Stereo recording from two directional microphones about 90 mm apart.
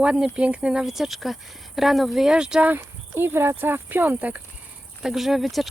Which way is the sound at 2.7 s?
25° right (ahead or behind).